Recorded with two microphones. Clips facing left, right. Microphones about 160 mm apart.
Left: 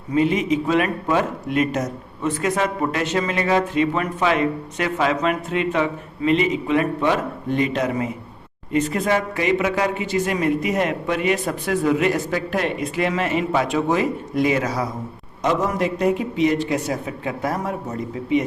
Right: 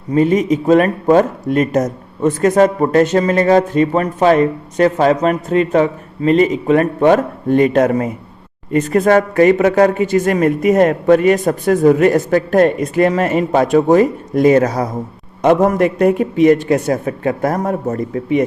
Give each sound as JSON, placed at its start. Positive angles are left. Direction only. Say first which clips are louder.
{"t": 0.1, "sound": "a man's voice", "louder": "right 6 dB", "side_deg": -40}
{"t": 15.4, "sound": "a man's voice", "louder": "right 9 dB", "side_deg": -55}